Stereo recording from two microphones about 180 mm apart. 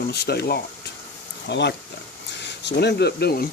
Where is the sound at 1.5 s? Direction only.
75° left (ahead or behind).